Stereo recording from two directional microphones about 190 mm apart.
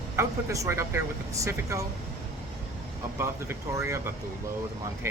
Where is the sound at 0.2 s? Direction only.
15° right (ahead or behind).